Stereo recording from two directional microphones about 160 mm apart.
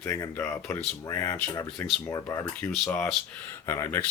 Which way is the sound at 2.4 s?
10° left (ahead or behind).